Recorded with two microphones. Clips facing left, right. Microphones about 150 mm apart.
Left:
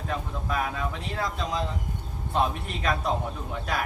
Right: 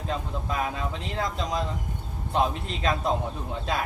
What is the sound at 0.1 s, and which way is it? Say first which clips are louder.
A man's voice: even; 20° right (ahead or behind).